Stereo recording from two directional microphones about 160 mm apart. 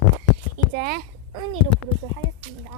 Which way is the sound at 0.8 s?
70° right (ahead or behind).